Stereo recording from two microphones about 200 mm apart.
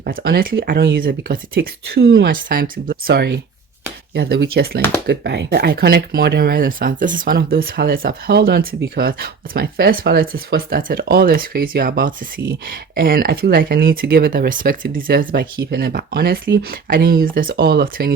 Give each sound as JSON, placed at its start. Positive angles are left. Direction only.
{"t": 0.0, "sound": "speech", "side_deg": -50}